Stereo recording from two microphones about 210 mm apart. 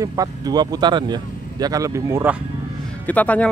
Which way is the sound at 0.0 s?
15° right (ahead or behind).